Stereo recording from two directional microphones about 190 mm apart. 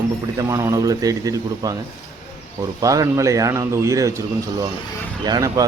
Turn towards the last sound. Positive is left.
turn(degrees=-20)  # may be behind; listen again after turning